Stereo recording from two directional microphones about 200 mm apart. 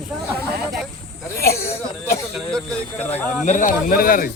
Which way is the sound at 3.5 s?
40° left (ahead or behind).